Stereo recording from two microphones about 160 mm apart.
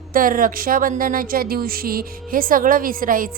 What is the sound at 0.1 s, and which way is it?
Speech, 60° right (ahead or behind).